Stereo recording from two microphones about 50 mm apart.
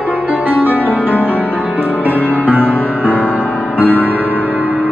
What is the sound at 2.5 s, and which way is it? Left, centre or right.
Music, right.